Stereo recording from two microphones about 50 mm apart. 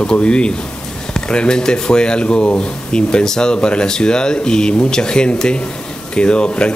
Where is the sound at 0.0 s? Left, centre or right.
Centre.